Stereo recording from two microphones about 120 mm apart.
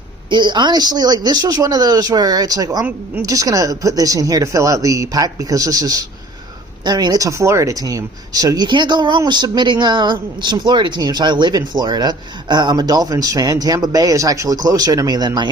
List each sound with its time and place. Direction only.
0.3 s speech: 40° right (ahead or behind)